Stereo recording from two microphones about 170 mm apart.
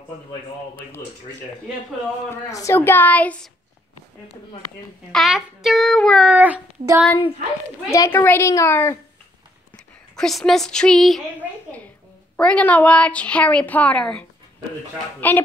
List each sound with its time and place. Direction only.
2.2 s a woman's voice: 15° left (ahead or behind)
5.1 s a child's voice: centre (ahead or behind)
6.2 s speech: 10° right (ahead or behind)
7.9 s a woman's voice: 15° left (ahead or behind)
10.1 s a child's voice: 5° left (ahead or behind)
12.4 s a woman's voice: 5° left (ahead or behind)